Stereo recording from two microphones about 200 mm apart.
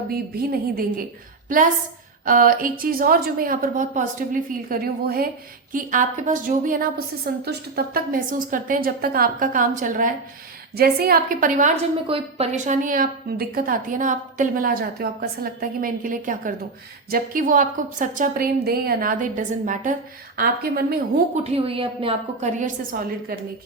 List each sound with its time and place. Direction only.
0.1 s a woman's voice: 50° right (ahead or behind)
2.2 s a woman's voice: 45° right (ahead or behind)
12.0 s a woman's voice: 30° right (ahead or behind); by 21.0 s 50° right (ahead or behind)
21.3 s a woman's voice: 30° right (ahead or behind)